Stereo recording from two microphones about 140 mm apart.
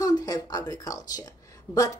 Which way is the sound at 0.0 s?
25° left (ahead or behind).